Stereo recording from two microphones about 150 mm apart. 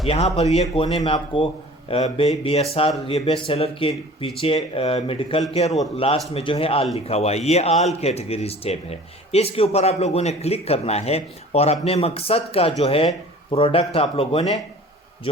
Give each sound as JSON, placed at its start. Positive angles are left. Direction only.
{"t": 0.1, "sound": "speech", "side_deg": 45}